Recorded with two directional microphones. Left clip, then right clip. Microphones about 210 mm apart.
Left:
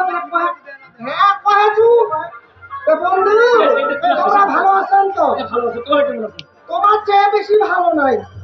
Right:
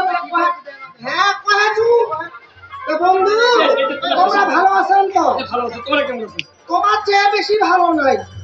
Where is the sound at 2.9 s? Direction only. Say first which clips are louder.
Left 1 dB; 55° left (ahead or behind).